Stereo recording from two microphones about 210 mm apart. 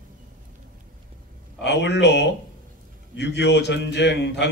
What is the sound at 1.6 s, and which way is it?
A man's voice, 55° left (ahead or behind).